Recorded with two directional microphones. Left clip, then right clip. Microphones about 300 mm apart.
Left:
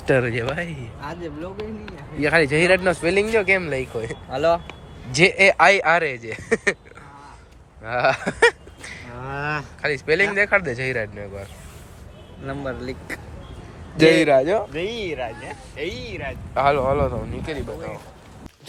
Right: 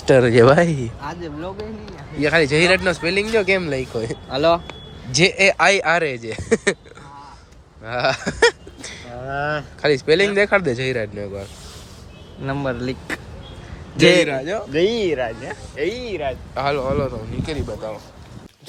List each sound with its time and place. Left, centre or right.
0.1 s speech: centre
2.1 s speech: centre
7.9 s speech: centre
12.5 s speech: right
14.3 s speech: centre
14.7 s speech: right
16.6 s speech: centre